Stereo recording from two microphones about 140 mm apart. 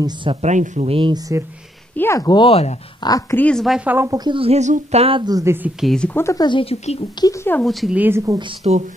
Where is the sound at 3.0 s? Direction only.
25° left (ahead or behind).